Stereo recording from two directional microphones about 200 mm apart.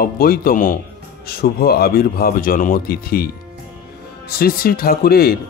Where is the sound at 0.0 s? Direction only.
45° left (ahead or behind).